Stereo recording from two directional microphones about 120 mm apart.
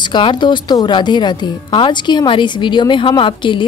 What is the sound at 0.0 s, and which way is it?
A woman's voice, 40° left (ahead or behind).